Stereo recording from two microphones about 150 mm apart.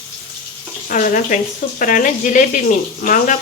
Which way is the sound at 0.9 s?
60° left (ahead or behind).